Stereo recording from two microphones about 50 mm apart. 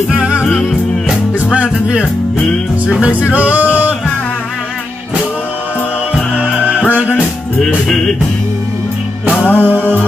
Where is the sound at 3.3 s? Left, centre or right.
Right.